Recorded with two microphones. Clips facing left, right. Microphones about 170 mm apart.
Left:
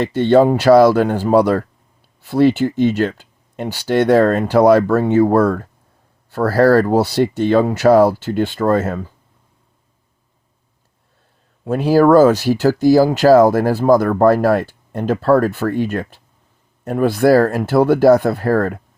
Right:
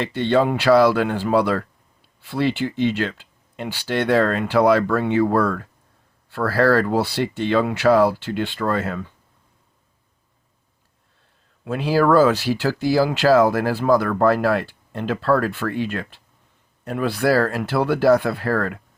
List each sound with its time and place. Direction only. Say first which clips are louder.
0.0 s speech: left 7 dB; 45° left (ahead or behind)
11.6 s speech: left 6 dB; 40° left (ahead or behind)